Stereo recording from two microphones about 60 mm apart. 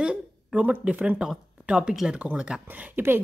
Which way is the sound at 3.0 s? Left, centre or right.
Right.